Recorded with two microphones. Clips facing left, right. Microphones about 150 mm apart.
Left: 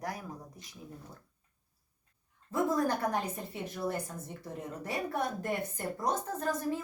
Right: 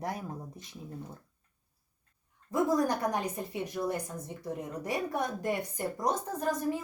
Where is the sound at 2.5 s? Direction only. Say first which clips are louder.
Right 2 dB; 15° right (ahead or behind).